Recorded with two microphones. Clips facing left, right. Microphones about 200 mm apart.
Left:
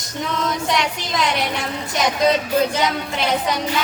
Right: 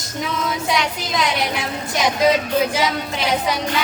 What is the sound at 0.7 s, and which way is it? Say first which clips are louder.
Speech: even; centre (ahead or behind).